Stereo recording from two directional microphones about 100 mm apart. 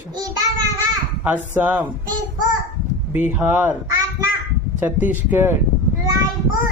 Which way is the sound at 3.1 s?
15° right (ahead or behind).